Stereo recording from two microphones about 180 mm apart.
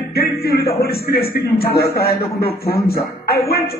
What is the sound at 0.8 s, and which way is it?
A man's voice, 60° left (ahead or behind).